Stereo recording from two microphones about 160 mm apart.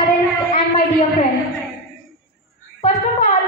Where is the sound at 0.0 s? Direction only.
55° left (ahead or behind).